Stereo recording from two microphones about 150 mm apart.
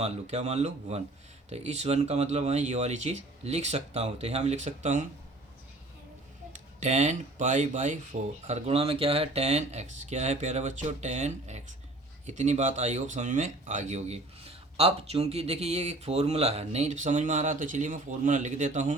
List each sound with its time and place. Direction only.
0.0 s speech: 45° right (ahead or behind)
6.5 s speech: 50° right (ahead or behind)